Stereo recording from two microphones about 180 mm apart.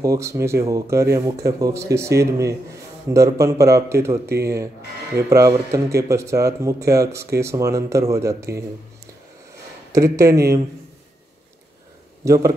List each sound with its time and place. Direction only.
0.0 s a man's voice: 20° right (ahead or behind)
9.9 s a man's voice: 15° right (ahead or behind)
12.3 s a man's voice: 15° right (ahead or behind)